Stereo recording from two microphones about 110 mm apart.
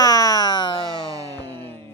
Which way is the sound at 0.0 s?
35° left (ahead or behind).